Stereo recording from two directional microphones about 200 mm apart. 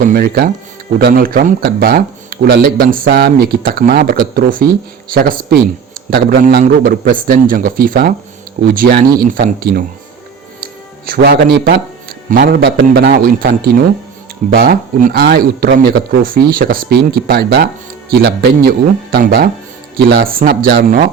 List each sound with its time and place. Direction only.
0.0 s speech: 45° right (ahead or behind)